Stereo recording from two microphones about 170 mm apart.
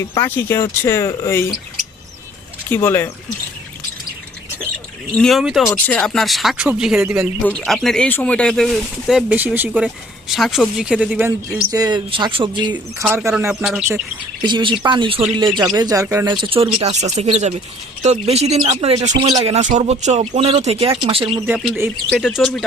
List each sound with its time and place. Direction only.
0.0 s speech: 15° left (ahead or behind)
2.6 s speech: 10° left (ahead or behind)
5.1 s speech: centre (ahead or behind)
11.7 s speech: 25° right (ahead or behind)
12.7 s speech: 10° right (ahead or behind)
14.4 s speech: 30° right (ahead or behind)
16.7 s speech: 40° right (ahead or behind)
21.4 s speech: 5° right (ahead or behind)